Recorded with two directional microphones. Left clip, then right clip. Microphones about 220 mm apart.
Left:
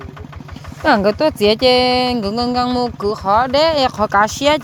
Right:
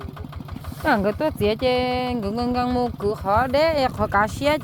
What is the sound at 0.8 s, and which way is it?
Speech, 10° left (ahead or behind).